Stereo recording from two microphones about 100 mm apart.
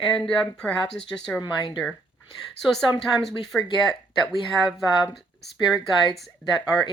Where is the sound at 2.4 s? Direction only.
5° left (ahead or behind).